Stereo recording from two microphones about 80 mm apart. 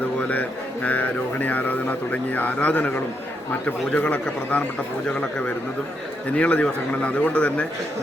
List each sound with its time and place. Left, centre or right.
0.2 s speech: centre
6.3 s speech: centre